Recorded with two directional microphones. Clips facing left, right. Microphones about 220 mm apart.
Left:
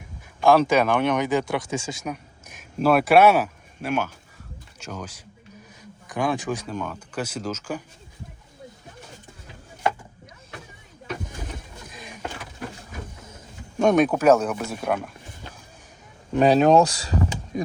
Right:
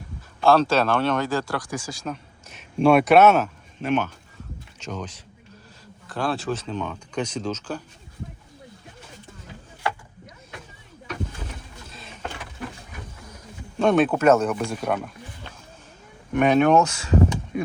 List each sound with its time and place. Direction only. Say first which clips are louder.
0.4 s speech: left 1 dB; 15° left (ahead or behind)
2.7 s speech: right 2 dB; 5° left (ahead or behind)
11.9 s vehicle: left 2 dB; 15° left (ahead or behind)
13.2 s a sound: right 2 dB; 25° left (ahead or behind)
13.8 s speech: even; 10° left (ahead or behind)
16.3 s speech: left 1 dB; 35° left (ahead or behind)